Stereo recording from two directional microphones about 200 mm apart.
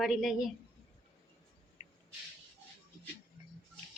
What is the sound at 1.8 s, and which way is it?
Owl, 20° right (ahead or behind).